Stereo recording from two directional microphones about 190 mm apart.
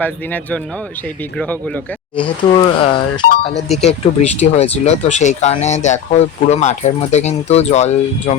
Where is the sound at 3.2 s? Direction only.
55° left (ahead or behind).